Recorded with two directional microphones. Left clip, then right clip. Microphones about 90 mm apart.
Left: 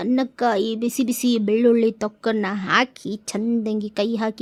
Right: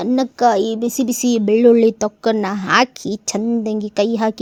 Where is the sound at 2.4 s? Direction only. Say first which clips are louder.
Right 4 dB; 40° right (ahead or behind).